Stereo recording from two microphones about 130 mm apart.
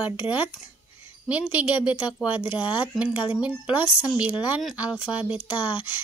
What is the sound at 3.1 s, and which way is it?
Speech, 40° left (ahead or behind).